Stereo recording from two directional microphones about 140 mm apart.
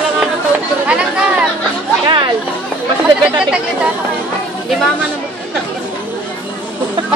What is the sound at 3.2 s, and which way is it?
Speech, 5° right (ahead or behind).